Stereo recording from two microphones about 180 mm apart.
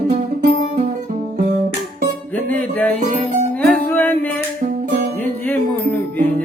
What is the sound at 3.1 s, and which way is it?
Music, 45° right (ahead or behind).